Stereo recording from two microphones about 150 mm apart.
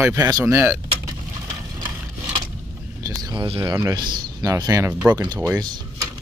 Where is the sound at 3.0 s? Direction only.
25° right (ahead or behind).